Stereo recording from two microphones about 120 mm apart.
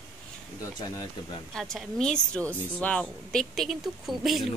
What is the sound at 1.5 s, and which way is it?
Speech, centre (ahead or behind).